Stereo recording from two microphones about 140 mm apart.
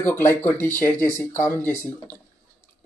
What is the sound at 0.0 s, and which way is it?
Speech, 15° left (ahead or behind).